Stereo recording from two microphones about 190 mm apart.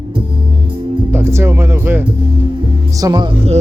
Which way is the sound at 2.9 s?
20° right (ahead or behind).